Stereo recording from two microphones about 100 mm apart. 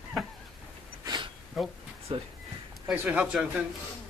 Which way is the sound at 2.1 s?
75° right (ahead or behind).